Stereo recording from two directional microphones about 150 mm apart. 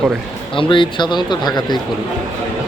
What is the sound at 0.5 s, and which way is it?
Speech, 35° left (ahead or behind).